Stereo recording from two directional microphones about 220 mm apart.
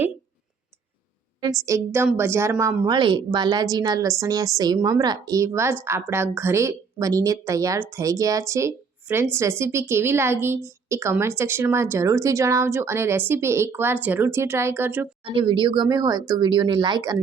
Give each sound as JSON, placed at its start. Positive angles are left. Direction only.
{"t": 1.4, "sound": "a woman's voice", "side_deg": -15}
{"t": 15.2, "sound": "speech", "side_deg": -25}